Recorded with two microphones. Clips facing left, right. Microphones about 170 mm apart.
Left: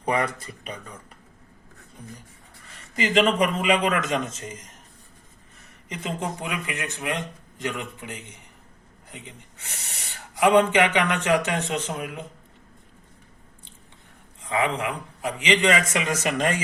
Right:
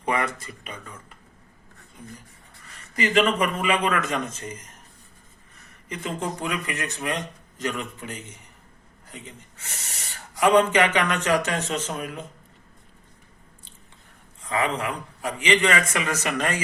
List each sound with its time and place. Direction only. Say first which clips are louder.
0.0 s speech: left 1 dB; 35° left (ahead or behind)
2.9 s speech: even; 25° left (ahead or behind)
5.9 s a man's voice: even; 20° left (ahead or behind)
10.4 s a man's voice: even; 15° left (ahead or behind)
14.5 s a man's voice: left 1 dB; 15° left (ahead or behind)